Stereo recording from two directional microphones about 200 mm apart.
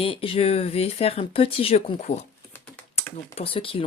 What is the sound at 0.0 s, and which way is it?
Speech, 25° left (ahead or behind).